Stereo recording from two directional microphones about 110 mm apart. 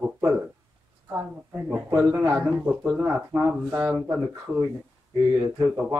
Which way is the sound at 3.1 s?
20° right (ahead or behind).